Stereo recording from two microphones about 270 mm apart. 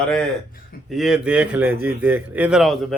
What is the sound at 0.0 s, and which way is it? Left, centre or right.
A man's voice, centre.